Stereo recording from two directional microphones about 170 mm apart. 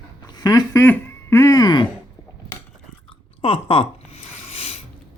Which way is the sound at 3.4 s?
35° left (ahead or behind).